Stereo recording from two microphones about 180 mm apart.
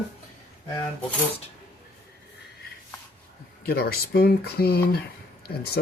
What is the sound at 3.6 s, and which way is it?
Speech, 60° left (ahead or behind).